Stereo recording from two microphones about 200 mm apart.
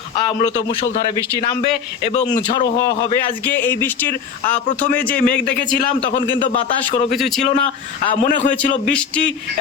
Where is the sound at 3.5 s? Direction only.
10° left (ahead or behind).